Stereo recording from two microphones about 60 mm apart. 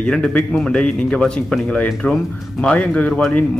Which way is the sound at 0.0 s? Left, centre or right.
Centre.